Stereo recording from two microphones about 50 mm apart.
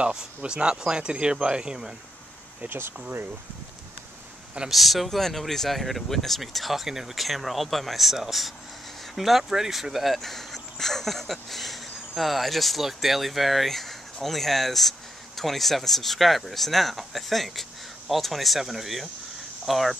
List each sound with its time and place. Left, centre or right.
0.0 s speech: centre
2.6 s speech: right
4.6 s speech: centre